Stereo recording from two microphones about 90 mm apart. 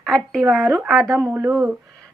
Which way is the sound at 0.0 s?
5° left (ahead or behind).